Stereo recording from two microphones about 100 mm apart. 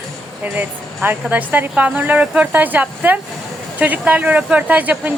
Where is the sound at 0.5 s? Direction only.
15° right (ahead or behind).